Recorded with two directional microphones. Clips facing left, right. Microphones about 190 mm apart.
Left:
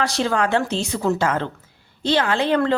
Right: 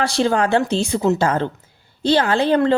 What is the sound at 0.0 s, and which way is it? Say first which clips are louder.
A woman's voice: right 3 dB; 30° right (ahead or behind).